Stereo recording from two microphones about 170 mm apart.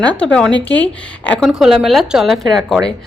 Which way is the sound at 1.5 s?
5° right (ahead or behind).